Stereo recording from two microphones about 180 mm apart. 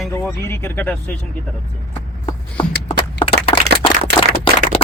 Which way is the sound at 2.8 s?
30° left (ahead or behind).